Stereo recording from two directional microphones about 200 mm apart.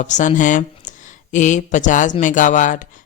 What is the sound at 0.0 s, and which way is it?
Speech, 35° left (ahead or behind).